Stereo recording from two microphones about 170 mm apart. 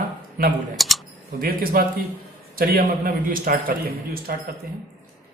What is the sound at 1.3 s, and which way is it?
A man's voice, 60° right (ahead or behind).